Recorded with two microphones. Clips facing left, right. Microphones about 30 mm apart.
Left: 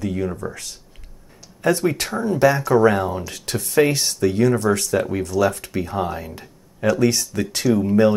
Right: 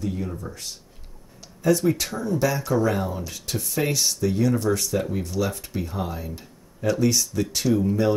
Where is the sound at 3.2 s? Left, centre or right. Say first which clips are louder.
Left 3 dB; left.